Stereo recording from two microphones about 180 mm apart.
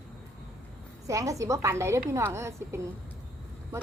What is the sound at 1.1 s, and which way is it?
A woman's voice, 20° right (ahead or behind).